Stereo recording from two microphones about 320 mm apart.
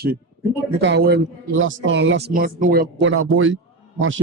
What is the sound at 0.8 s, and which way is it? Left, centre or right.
A man's voice, right.